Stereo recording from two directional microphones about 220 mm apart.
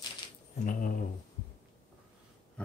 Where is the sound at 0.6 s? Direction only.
35° left (ahead or behind).